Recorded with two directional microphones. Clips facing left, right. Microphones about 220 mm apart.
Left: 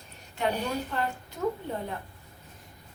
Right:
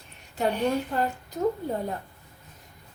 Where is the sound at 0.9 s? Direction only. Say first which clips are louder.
Right 4 dB; 40° right (ahead or behind).